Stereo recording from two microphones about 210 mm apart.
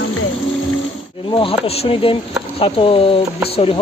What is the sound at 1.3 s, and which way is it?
Speech, 25° left (ahead or behind).